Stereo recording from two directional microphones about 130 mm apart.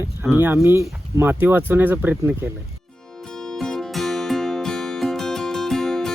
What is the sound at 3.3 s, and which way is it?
Music, 5° left (ahead or behind).